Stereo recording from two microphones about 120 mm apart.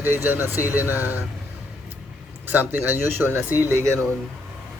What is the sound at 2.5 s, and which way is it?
Speech, 15° right (ahead or behind).